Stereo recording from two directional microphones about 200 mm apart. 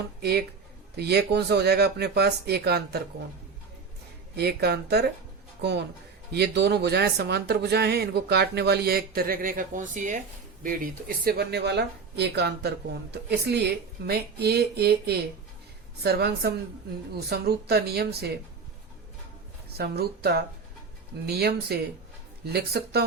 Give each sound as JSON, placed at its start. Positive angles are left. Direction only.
{"t": 0.2, "sound": "speech", "side_deg": -50}
{"t": 4.4, "sound": "speech", "side_deg": -55}
{"t": 6.3, "sound": "speech", "side_deg": -55}
{"t": 11.3, "sound": "speech", "side_deg": -55}
{"t": 19.7, "sound": "speech", "side_deg": -50}